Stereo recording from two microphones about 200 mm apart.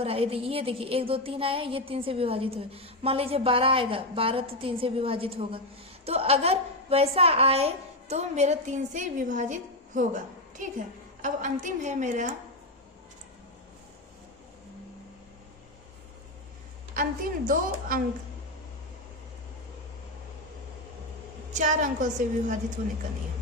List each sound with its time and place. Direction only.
0.0 s a woman's voice: 30° right (ahead or behind)
11.2 s a woman's voice: 40° right (ahead or behind)
16.9 s a woman's voice: 45° right (ahead or behind)
21.6 s a woman's voice: 40° right (ahead or behind)